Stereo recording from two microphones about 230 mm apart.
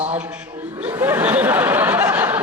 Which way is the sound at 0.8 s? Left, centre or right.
Centre.